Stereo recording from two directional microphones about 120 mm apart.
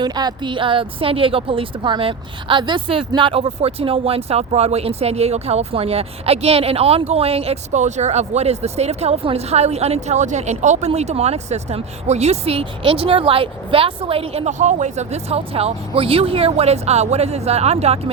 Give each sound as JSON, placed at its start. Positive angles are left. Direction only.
{"t": 0.0, "sound": "a woman's voice", "side_deg": -35}